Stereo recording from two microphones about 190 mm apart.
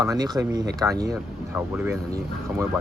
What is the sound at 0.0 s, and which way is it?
Speech, 15° right (ahead or behind).